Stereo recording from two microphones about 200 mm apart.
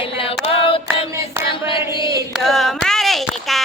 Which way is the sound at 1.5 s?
25° left (ahead or behind).